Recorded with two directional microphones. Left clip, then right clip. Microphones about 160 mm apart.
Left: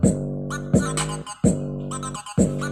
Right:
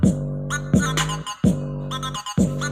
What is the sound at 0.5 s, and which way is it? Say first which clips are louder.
Music: right 2 dB; 25° right (ahead or behind).